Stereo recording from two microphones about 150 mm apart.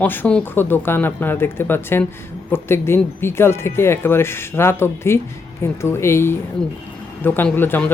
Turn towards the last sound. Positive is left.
turn(degrees=15)  # may be behind; listen again after turning